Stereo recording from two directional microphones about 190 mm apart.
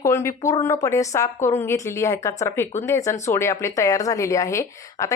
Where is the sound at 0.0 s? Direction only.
15° left (ahead or behind).